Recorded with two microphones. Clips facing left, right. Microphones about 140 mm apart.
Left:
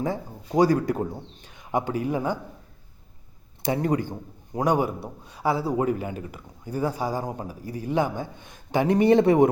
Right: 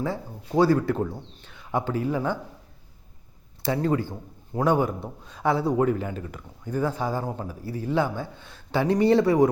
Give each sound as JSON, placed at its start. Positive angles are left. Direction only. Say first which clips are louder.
{"t": 0.0, "sound": "a man's voice", "louder": "left 1 dB", "side_deg": 15}
{"t": 3.6, "sound": "a man's voice", "louder": "even", "side_deg": 20}